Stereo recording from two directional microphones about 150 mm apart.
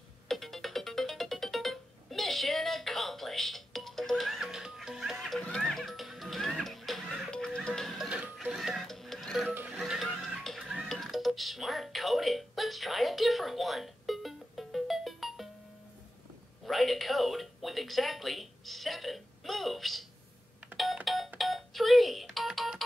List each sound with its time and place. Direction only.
0.3 s music: centre (ahead or behind)
9.5 s music: 15° right (ahead or behind)
9.8 s music: centre (ahead or behind)
16.6 s a sound: centre (ahead or behind)
20.7 s doorbell: centre (ahead or behind)
21.4 s music: centre (ahead or behind)